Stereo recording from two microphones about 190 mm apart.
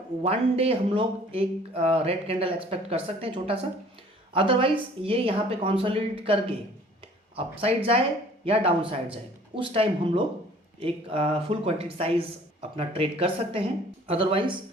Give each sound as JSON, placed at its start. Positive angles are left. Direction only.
{"t": 0.2, "sound": "a woman's voice", "side_deg": -30}